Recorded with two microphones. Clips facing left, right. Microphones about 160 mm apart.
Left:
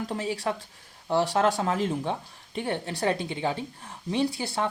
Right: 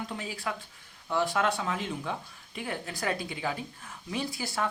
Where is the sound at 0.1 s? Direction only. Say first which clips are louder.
Left 6 dB; 35° left (ahead or behind).